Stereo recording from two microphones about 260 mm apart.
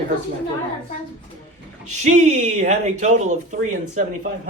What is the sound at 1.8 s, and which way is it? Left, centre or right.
Speech, right.